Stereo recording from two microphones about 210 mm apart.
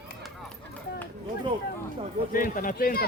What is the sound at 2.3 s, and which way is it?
Speech, 40° left (ahead or behind).